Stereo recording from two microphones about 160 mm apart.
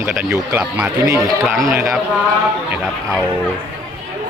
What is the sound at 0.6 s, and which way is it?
A man's voice, 5° right (ahead or behind).